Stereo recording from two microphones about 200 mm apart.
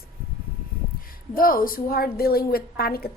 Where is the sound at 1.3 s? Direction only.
45° left (ahead or behind).